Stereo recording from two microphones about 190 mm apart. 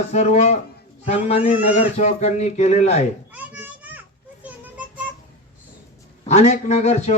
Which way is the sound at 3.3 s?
10° right (ahead or behind).